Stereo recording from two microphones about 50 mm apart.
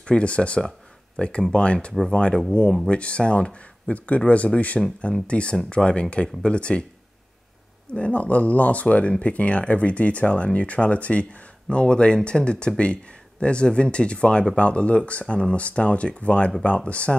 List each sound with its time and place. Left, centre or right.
0.0 s speech: left
7.9 s speech: left